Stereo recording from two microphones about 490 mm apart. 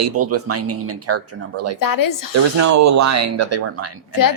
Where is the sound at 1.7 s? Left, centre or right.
Left.